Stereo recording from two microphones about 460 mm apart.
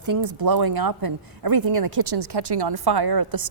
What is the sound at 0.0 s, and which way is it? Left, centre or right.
Speech, right.